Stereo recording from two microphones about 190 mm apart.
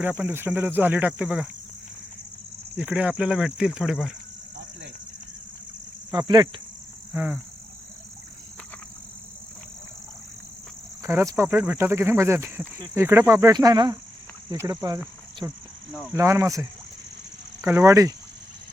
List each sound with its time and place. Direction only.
0.0 s speech: 10° right (ahead or behind)
2.7 s speech: 5° right (ahead or behind)
6.1 s speech: 25° right (ahead or behind)
7.1 s speech: 10° right (ahead or behind)
11.0 s speech: 15° right (ahead or behind)